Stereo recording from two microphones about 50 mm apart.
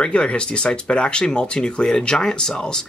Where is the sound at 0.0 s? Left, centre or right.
Centre.